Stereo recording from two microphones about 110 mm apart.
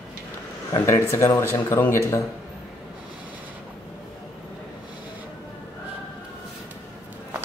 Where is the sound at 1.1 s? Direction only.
25° left (ahead or behind).